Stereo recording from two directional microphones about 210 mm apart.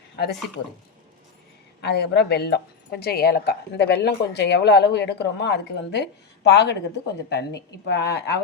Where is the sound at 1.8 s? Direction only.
50° left (ahead or behind).